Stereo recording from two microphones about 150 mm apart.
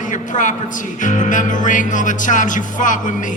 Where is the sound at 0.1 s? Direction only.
60° left (ahead or behind).